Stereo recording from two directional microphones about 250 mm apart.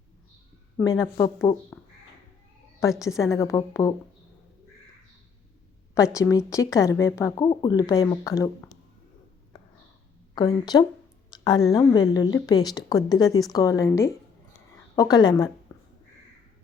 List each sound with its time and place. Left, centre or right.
0.8 s a woman's voice: centre
3.2 s a woman's voice: centre
6.1 s a woman's voice: centre
10.3 s a woman's voice: centre
15.7 s a sound: centre